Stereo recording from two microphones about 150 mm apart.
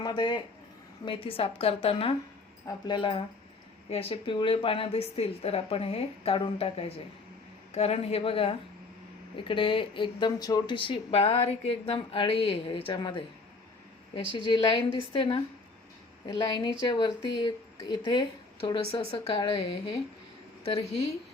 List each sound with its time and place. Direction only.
0.0 s speech: 30° left (ahead or behind)
14.3 s speech: 35° left (ahead or behind)